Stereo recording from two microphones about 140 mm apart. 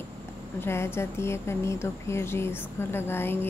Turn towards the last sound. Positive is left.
turn(degrees=15)  # may be behind; listen again after turning